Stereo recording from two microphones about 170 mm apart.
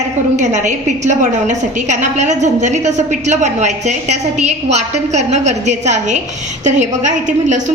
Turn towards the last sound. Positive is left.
turn(degrees=-45)  # may be behind; listen again after turning